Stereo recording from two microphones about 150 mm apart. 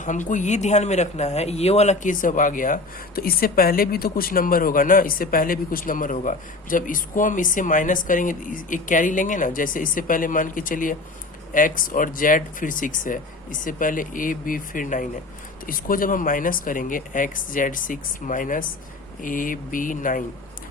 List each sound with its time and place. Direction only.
0.0 s speech: 55° left (ahead or behind)